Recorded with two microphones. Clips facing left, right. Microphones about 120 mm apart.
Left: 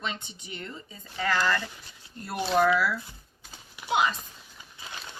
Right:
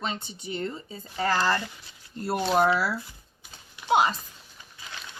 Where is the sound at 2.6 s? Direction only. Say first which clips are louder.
Even; 35° right (ahead or behind).